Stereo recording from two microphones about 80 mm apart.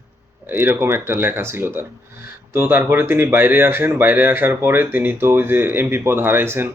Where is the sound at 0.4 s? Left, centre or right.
Right.